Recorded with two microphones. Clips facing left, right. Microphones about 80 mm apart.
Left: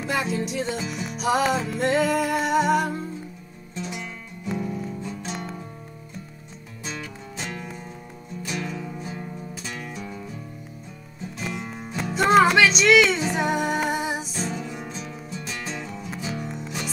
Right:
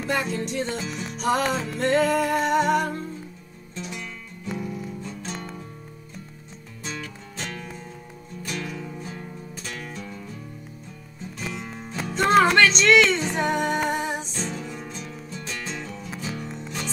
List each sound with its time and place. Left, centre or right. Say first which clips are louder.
0.0 s music: even; centre
3.7 s music: left 2 dB; centre
6.8 s music: even; centre
11.3 s music: left 2 dB; centre